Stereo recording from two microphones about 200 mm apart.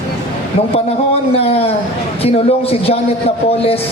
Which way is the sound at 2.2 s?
30° left (ahead or behind).